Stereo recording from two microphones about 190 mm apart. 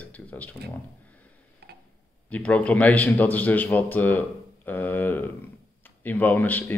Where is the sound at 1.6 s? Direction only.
60° right (ahead or behind).